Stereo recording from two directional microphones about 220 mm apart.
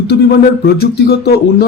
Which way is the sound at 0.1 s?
45° left (ahead or behind).